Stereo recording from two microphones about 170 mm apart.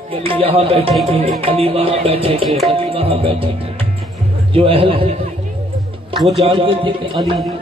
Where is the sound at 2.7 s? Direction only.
35° right (ahead or behind).